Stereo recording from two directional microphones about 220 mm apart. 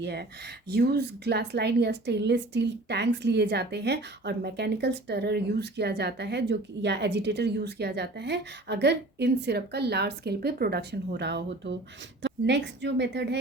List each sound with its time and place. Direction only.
0.0 s a woman's voice: 50° right (ahead or behind)